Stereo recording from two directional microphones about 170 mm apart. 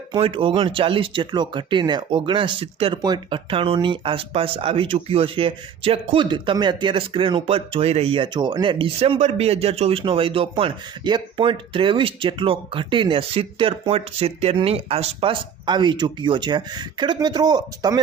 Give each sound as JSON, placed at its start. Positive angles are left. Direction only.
{"t": 0.1, "sound": "speech", "side_deg": -30}